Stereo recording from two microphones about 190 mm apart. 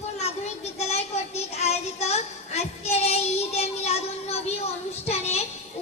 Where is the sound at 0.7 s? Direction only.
35° left (ahead or behind).